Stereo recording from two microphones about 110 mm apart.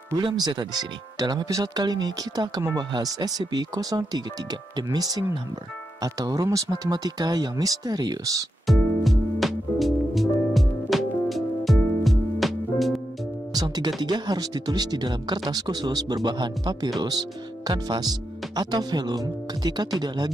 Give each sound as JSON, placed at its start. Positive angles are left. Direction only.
{"t": 0.2, "sound": "speech", "side_deg": -45}
{"t": 8.7, "sound": "music", "side_deg": 0}
{"t": 13.5, "sound": "music", "side_deg": -35}
{"t": 14.0, "sound": "speech", "side_deg": -40}